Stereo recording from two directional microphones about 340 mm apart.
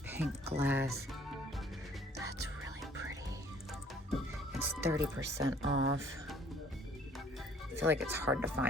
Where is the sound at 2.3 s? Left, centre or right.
Right.